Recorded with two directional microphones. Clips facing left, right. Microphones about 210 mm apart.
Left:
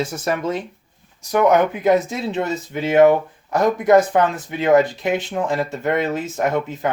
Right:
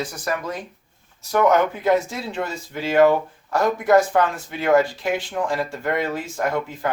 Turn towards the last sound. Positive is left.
turn(degrees=20)  # may be behind; listen again after turning